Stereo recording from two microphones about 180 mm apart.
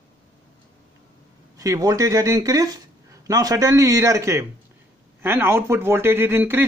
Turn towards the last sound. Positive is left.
turn(degrees=-10)  # may be behind; listen again after turning